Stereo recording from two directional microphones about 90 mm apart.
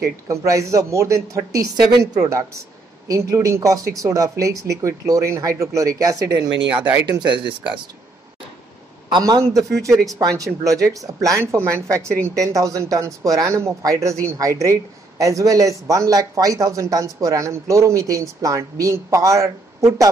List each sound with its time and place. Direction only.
0.3 s speech: 35° right (ahead or behind)
7.1 s speech: 60° right (ahead or behind)
9.2 s speech: 40° right (ahead or behind)